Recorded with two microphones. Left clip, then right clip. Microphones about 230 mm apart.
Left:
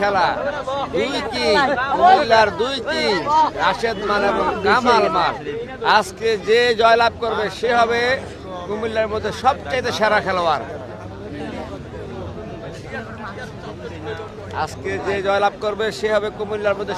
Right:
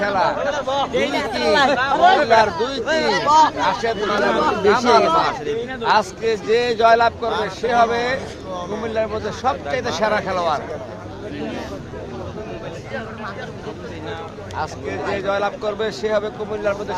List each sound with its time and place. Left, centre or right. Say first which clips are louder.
0.0 s speech: left 1 dB; left
0.5 s speech: right 2 dB; right
2.2 s speech: even; left
3.2 s speech: right 4 dB; right
3.6 s speech: left 1 dB; left
4.0 s speech: even; right
4.6 s speech: even; left
14.5 s speech: left 2 dB; left